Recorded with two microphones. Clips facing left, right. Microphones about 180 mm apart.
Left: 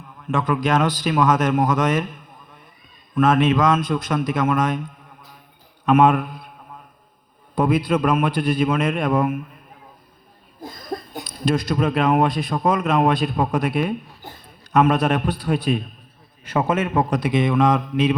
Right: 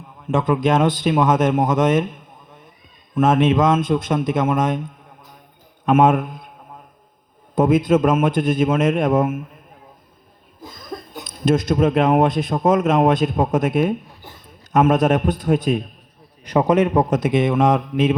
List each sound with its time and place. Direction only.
0.3 s a man's voice: 25° right (ahead or behind)
7.5 s a man's voice: 20° right (ahead or behind)
10.6 s a sound: 55° left (ahead or behind)
11.2 s a man's voice: 20° right (ahead or behind)